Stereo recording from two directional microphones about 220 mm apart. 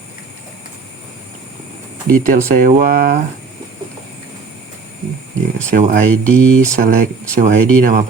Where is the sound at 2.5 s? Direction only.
40° right (ahead or behind).